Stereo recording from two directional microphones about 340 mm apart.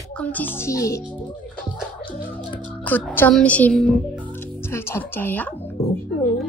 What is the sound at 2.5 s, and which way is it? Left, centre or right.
Speech, centre.